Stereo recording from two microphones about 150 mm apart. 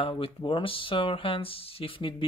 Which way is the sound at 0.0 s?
35° left (ahead or behind).